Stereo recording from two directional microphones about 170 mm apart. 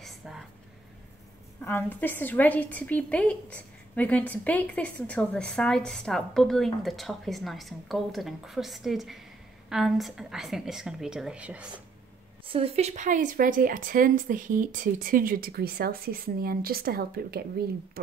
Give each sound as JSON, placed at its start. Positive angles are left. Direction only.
{"t": 0.0, "sound": "vehicle", "side_deg": 0}
{"t": 1.6, "sound": "a woman's voice", "side_deg": 15}
{"t": 12.4, "sound": "speech", "side_deg": -35}